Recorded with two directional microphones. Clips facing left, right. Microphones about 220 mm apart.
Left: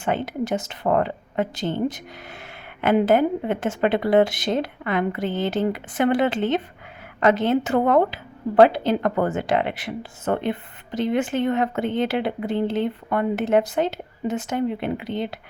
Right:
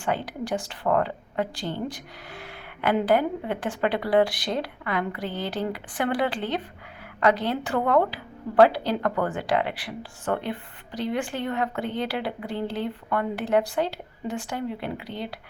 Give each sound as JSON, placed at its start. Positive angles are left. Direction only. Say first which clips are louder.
{"t": 0.0, "sound": "speech", "louder": "left 4 dB", "side_deg": 20}